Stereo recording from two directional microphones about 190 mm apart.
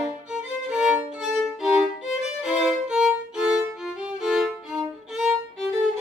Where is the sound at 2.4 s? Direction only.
Centre (ahead or behind).